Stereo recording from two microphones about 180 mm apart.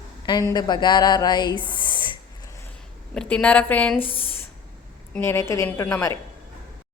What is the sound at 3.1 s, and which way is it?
A woman's voice, 5° left (ahead or behind).